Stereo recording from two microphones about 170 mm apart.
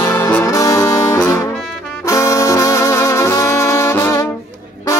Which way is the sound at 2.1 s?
20° left (ahead or behind).